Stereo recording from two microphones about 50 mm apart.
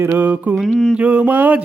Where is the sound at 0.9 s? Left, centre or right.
Right.